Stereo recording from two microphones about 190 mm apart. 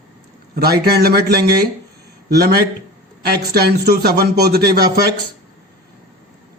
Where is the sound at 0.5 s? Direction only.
55° right (ahead or behind).